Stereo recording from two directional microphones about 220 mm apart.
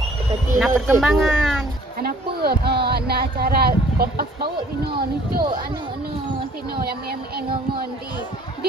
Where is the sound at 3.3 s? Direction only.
45° right (ahead or behind).